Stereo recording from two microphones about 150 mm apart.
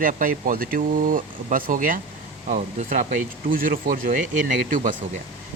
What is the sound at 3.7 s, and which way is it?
Speech, 65° right (ahead or behind).